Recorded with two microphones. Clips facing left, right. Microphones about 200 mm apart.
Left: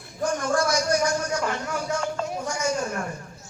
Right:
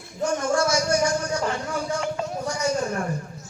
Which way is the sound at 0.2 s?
25° right (ahead or behind).